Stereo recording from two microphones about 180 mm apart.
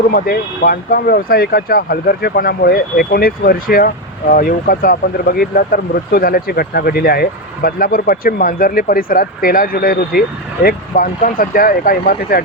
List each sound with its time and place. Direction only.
0.1 s speech: 55° left (ahead or behind)